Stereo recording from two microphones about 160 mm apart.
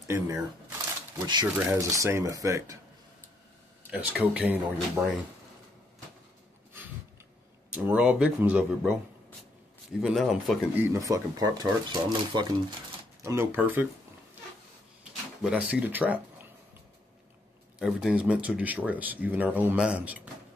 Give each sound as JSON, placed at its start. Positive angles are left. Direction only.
{"t": 0.1, "sound": "speech", "side_deg": -15}
{"t": 1.2, "sound": "speech", "side_deg": -25}
{"t": 3.9, "sound": "speech", "side_deg": -5}
{"t": 7.7, "sound": "speech", "side_deg": -10}
{"t": 10.0, "sound": "speech", "side_deg": -5}
{"t": 10.7, "sound": "speech", "side_deg": -15}
{"t": 13.2, "sound": "speech", "side_deg": -15}
{"t": 15.4, "sound": "speech", "side_deg": -10}
{"t": 17.7, "sound": "speech", "side_deg": -5}